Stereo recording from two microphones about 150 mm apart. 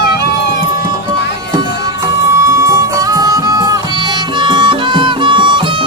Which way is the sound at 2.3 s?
20° right (ahead or behind).